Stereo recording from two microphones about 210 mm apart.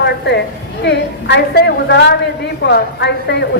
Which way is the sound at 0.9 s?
55° left (ahead or behind).